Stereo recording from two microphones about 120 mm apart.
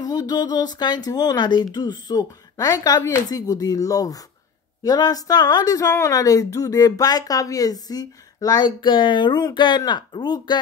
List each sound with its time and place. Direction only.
0.0 s a woman's voice: 30° left (ahead or behind)